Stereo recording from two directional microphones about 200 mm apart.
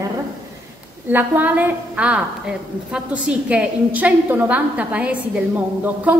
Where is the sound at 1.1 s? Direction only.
10° right (ahead or behind).